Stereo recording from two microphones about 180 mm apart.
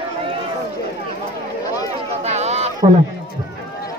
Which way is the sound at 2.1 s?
35° right (ahead or behind).